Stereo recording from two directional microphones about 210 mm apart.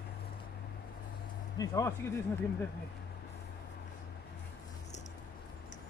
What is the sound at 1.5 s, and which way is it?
Speech, 15° left (ahead or behind).